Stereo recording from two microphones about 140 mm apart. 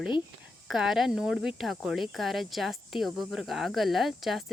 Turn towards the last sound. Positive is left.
turn(degrees=0)  # may be behind; listen again after turning